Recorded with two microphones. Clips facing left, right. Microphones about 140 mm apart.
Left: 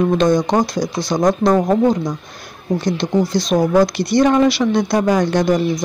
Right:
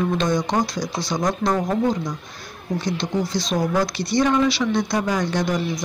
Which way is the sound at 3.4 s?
60° left (ahead or behind).